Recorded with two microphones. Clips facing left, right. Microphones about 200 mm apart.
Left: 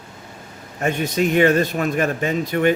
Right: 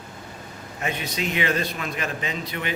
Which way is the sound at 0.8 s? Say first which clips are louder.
Left 8 dB; 45° left (ahead or behind).